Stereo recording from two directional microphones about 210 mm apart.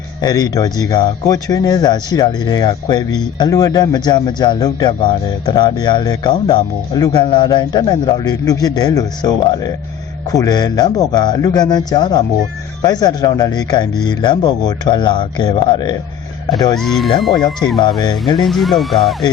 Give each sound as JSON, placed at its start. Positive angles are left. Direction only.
{"t": 0.2, "sound": "speech", "side_deg": 20}
{"t": 16.7, "sound": "speech", "side_deg": 0}
{"t": 17.3, "sound": "speech", "side_deg": 20}
{"t": 18.4, "sound": "speech", "side_deg": 0}